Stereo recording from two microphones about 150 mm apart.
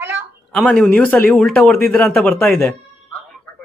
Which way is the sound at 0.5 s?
5° left (ahead or behind).